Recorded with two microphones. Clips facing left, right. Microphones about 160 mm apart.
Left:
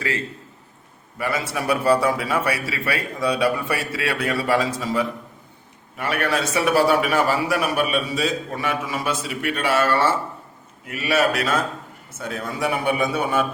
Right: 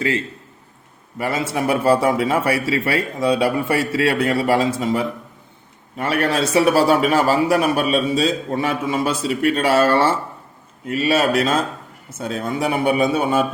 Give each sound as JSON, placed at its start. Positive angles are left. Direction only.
{"t": 1.2, "sound": "a man's voice", "side_deg": -25}